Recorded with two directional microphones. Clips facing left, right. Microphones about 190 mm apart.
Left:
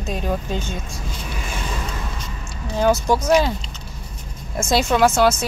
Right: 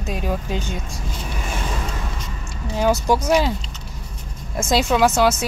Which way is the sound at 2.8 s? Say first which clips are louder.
Left 1 dB; 15° right (ahead or behind).